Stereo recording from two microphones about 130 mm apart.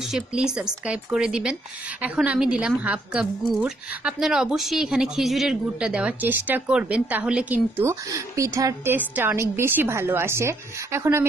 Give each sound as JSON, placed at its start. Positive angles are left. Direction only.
{"t": 0.1, "sound": "a woman's voice", "side_deg": -5}
{"t": 8.9, "sound": "a woman's voice", "side_deg": -15}